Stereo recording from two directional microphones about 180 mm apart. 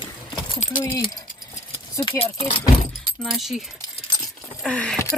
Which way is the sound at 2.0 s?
25° left (ahead or behind).